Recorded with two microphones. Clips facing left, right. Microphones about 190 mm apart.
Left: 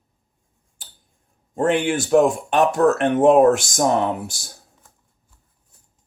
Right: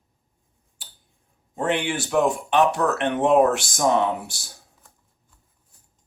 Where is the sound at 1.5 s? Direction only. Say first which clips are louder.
Left 5 dB; 50° left (ahead or behind).